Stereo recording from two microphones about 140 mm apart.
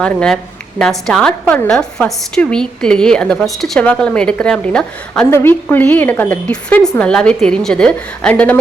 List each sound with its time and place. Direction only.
0.0 s a woman's voice: 5° left (ahead or behind)